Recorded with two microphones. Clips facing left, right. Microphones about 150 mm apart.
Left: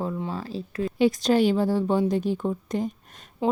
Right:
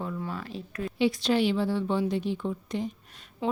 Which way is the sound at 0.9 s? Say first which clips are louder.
Left 4 dB; 45° left (ahead or behind).